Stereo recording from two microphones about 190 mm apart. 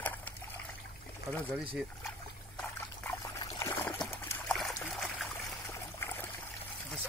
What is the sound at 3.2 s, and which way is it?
Trickle, 15° left (ahead or behind).